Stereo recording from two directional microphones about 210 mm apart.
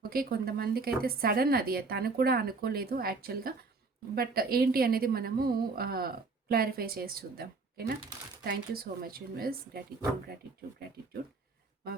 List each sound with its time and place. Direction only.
0.0 s a woman's voice: 45° right (ahead or behind)